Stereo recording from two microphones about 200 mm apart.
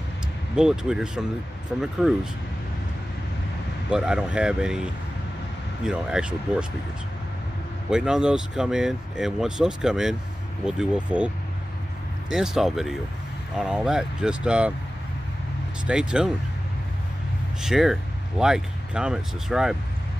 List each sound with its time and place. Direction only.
0.6 s speech: 5° right (ahead or behind)
3.9 s speech: 5° right (ahead or behind)
7.9 s speech: 5° right (ahead or behind)
15.9 s speech: 5° right (ahead or behind)
17.6 s speech: centre (ahead or behind)